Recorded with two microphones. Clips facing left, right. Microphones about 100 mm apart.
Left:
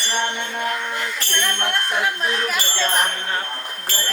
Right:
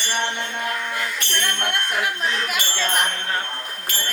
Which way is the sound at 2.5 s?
35° left (ahead or behind).